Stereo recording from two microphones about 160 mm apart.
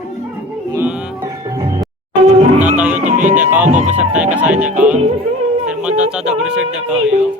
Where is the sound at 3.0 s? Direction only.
50° right (ahead or behind).